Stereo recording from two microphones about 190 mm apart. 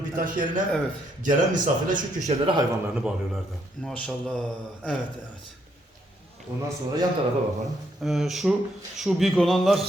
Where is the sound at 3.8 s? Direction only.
5° left (ahead or behind).